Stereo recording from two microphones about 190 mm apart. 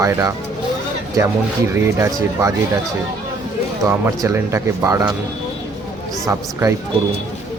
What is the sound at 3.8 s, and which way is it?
Speech, 15° right (ahead or behind).